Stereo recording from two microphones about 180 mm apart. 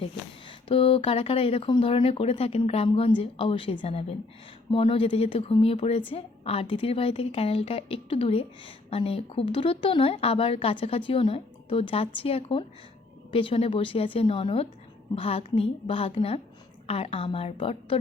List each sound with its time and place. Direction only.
0.7 s speech: 30° left (ahead or behind)